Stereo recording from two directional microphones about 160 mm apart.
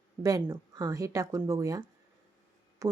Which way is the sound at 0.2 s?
20° right (ahead or behind).